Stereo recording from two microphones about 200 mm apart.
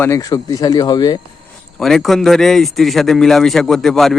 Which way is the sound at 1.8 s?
Centre (ahead or behind).